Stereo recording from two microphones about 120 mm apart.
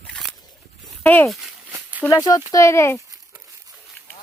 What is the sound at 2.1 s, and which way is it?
Speech, 30° left (ahead or behind).